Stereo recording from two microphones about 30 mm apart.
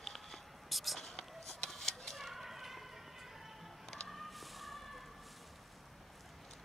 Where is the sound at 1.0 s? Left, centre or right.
Centre.